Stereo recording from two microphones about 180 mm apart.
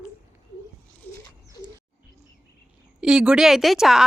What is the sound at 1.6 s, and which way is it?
Bird, 20° left (ahead or behind).